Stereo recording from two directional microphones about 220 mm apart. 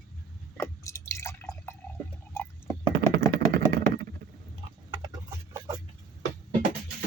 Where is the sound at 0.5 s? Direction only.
10° left (ahead or behind).